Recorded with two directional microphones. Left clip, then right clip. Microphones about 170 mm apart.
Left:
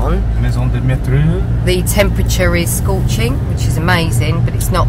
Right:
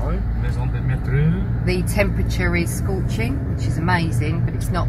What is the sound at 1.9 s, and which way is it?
Speech, 10° left (ahead or behind).